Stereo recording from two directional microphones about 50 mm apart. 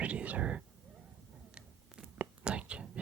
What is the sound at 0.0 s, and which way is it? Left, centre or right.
Whispering, right.